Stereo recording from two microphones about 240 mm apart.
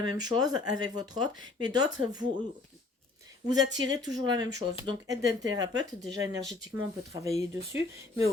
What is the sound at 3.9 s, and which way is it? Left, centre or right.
Speech, centre.